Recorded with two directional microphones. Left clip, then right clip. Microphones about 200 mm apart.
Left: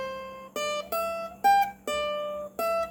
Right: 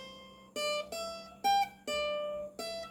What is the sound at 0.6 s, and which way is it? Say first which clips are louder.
Music: left 6 dB; 15° left (ahead or behind).